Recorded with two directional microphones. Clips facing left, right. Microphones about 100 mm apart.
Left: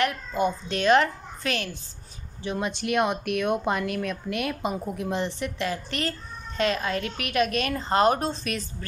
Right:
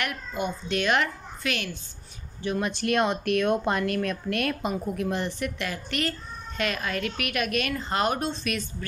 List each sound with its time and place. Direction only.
0.0 s a child's voice: 35° left (ahead or behind)
2.4 s speech: 20° left (ahead or behind)